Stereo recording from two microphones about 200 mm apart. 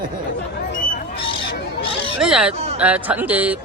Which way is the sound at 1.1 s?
25° left (ahead or behind).